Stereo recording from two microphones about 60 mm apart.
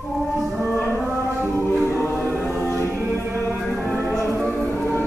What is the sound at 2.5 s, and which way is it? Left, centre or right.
Music, left.